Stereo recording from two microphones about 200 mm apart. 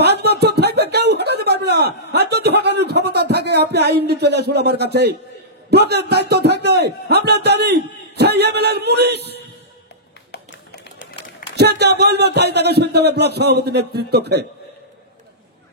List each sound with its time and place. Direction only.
0.0 s a sound: 55° right (ahead or behind)
5.7 s a man's voice: 55° right (ahead or behind)
10.3 s tap: 55° left (ahead or behind)
11.5 s a man's voice: 55° right (ahead or behind)